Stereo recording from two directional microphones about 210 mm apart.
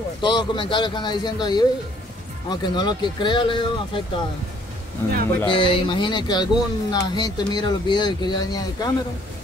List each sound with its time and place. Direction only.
0.2 s speech: 20° left (ahead or behind)
5.5 s speech: 25° left (ahead or behind)